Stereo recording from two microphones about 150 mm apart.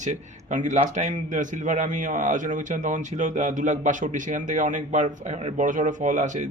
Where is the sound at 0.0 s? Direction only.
55° right (ahead or behind).